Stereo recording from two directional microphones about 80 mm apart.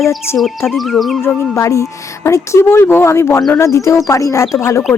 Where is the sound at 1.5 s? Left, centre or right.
Left.